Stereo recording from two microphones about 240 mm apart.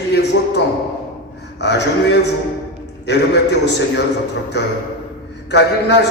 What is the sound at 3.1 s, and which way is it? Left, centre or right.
Speech, left.